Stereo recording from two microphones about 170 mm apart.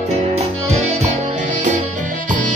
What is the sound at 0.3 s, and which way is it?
Music, 40° right (ahead or behind).